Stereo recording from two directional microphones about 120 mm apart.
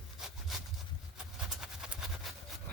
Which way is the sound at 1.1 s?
5° right (ahead or behind).